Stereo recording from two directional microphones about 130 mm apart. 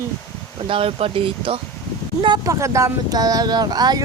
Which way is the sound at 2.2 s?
30° right (ahead or behind).